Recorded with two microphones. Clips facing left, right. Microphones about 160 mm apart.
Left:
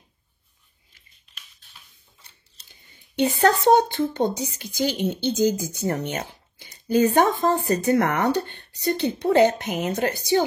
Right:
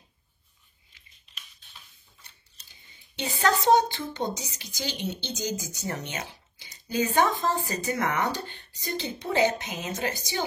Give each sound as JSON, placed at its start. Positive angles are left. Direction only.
{"t": 2.7, "sound": "speech", "side_deg": 55}